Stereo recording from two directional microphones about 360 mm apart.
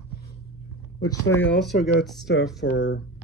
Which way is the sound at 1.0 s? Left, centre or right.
Centre.